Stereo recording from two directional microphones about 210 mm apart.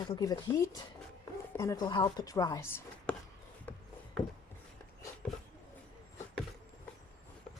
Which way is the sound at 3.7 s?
10° left (ahead or behind).